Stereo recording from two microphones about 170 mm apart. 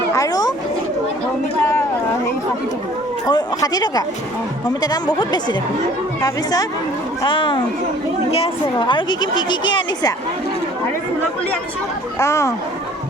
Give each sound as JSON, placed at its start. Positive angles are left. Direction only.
{"t": 0.1, "sound": "a sound", "side_deg": 20}
{"t": 3.2, "sound": "a woman's voice", "side_deg": 25}
{"t": 8.9, "sound": "a woman's voice", "side_deg": 25}
{"t": 12.2, "sound": "speech", "side_deg": 15}